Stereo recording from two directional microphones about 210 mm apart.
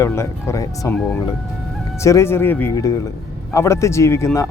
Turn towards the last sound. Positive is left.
turn(degrees=15)  # may be behind; listen again after turning